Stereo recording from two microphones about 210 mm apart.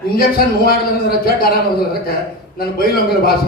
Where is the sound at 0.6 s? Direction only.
45° left (ahead or behind).